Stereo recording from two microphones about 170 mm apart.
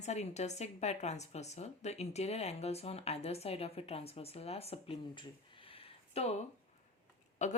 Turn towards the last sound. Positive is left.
turn(degrees=45)  # may be behind; listen again after turning